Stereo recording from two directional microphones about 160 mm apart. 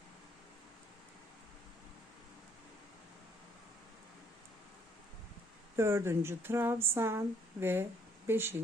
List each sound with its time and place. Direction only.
5.7 s speech: 15° right (ahead or behind)